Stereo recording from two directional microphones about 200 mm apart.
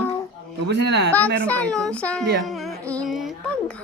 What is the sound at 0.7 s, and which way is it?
Speech, 55° right (ahead or behind).